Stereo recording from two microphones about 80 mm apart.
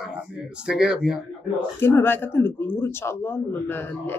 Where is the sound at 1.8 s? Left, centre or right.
Left.